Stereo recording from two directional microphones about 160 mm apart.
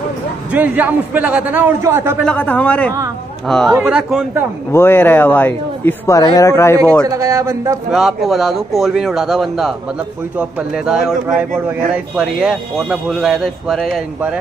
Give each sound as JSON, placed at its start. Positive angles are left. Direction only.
{"t": 0.5, "sound": "a man's voice", "side_deg": -10}
{"t": 2.2, "sound": "speech", "side_deg": 10}
{"t": 4.7, "sound": "speech", "side_deg": 15}
{"t": 7.1, "sound": "a man's voice", "side_deg": -20}
{"t": 7.9, "sound": "speech", "side_deg": 0}
{"t": 10.9, "sound": "speech", "side_deg": -5}